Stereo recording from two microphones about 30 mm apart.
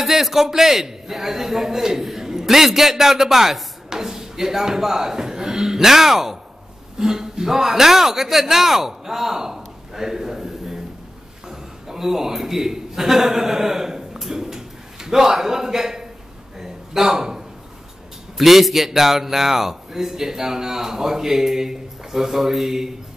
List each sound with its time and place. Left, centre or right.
0.0 s a man's voice: centre
16.5 s a sound: centre
18.4 s a man's voice: centre